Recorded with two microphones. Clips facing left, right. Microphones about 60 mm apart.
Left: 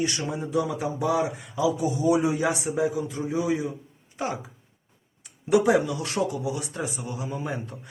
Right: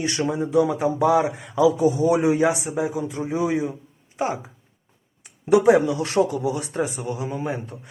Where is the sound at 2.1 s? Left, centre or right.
Right.